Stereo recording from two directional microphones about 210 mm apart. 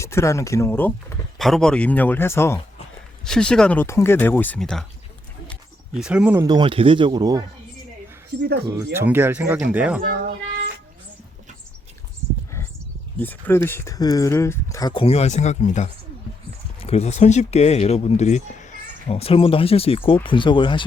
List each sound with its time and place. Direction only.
0.0 s speech: 15° left (ahead or behind)
6.0 s speech: 5° right (ahead or behind)
8.4 s speech: 55° right (ahead or behind)
8.7 s speech: 10° right (ahead or behind)
13.1 s speech: 10° left (ahead or behind)